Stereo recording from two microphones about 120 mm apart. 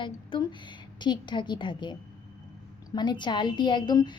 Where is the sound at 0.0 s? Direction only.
40° left (ahead or behind).